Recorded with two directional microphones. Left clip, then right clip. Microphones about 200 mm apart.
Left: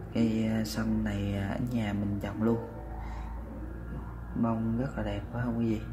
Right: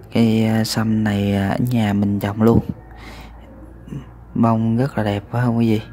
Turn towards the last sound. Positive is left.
turn(degrees=-45)  # may be behind; listen again after turning